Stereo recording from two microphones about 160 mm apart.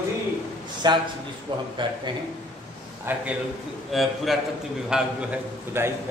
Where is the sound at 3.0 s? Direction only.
10° right (ahead or behind).